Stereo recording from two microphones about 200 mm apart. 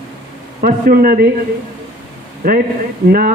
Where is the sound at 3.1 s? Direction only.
45° right (ahead or behind).